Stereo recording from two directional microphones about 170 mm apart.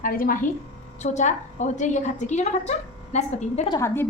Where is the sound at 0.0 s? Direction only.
55° left (ahead or behind).